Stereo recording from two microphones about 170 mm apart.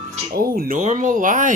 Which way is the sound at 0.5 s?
55° right (ahead or behind).